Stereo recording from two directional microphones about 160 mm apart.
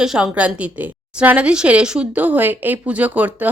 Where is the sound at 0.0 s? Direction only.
5° right (ahead or behind).